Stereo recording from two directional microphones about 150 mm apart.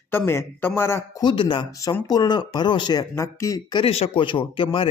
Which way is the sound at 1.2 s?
35° left (ahead or behind).